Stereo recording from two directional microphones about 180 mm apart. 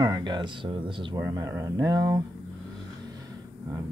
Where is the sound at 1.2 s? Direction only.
15° right (ahead or behind).